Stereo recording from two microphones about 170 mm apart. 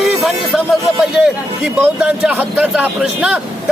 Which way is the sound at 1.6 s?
5° right (ahead or behind).